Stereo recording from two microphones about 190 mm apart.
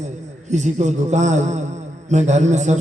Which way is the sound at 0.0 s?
40° right (ahead or behind).